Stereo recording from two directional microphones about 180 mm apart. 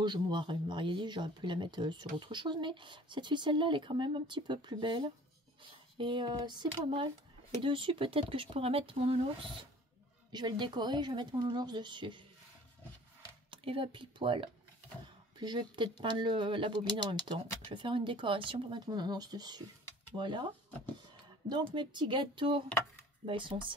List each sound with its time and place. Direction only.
0.0 s speech: 25° right (ahead or behind)
13.5 s speech: 30° right (ahead or behind)
21.7 s speech: 25° right (ahead or behind)